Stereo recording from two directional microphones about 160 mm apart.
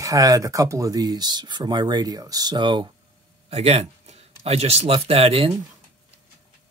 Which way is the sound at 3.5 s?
40° right (ahead or behind).